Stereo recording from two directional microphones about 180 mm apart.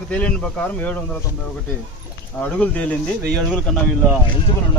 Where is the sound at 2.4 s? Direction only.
10° left (ahead or behind).